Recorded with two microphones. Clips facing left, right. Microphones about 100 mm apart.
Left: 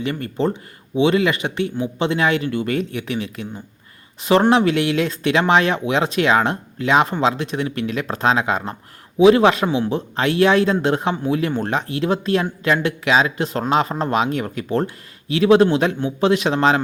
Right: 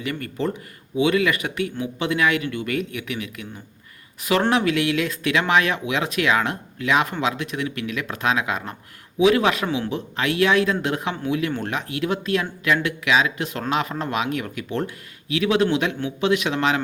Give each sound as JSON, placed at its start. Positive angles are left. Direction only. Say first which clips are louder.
{"t": 0.0, "sound": "speech", "louder": "left 4 dB", "side_deg": 30}